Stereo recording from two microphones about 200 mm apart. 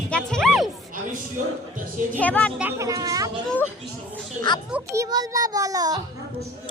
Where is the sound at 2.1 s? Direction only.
5° left (ahead or behind).